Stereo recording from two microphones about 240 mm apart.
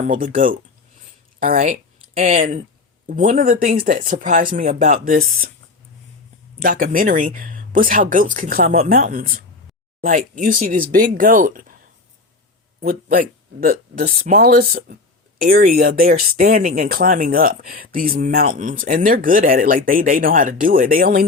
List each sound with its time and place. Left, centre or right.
0.0 s speech: right
6.6 s speech: right
12.8 s speech: right